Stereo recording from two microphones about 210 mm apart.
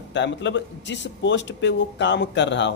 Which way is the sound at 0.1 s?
60° left (ahead or behind).